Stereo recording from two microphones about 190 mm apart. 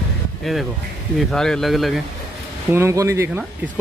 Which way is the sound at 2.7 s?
15° right (ahead or behind).